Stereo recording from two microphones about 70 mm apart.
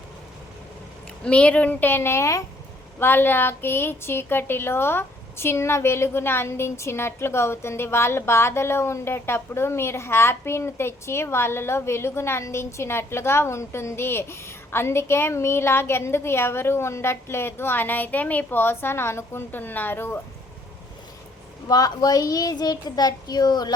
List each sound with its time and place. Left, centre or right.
1.2 s a child's voice: centre; by 2.4 s left
3.0 s a woman's voice: left
21.7 s a child's voice: left